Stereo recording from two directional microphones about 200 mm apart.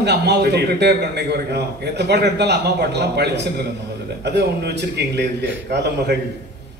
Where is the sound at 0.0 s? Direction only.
55° right (ahead or behind).